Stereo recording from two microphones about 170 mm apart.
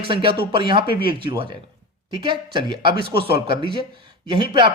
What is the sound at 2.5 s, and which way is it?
A man's voice, 30° right (ahead or behind).